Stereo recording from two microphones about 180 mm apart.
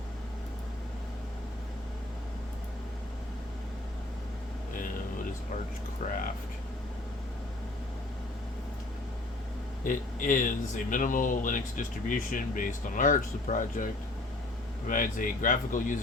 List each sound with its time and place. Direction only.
9.8 s speech: 45° left (ahead or behind)
14.8 s speech: 45° left (ahead or behind)